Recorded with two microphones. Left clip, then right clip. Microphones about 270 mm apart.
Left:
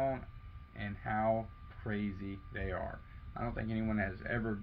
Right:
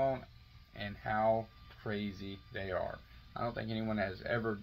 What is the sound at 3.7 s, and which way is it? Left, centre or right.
Speech, centre.